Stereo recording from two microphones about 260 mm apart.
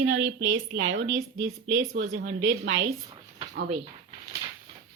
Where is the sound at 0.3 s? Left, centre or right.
Right.